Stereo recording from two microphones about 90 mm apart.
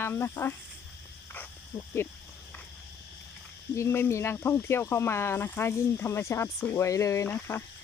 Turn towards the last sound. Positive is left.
turn(degrees=20)  # may be behind; listen again after turning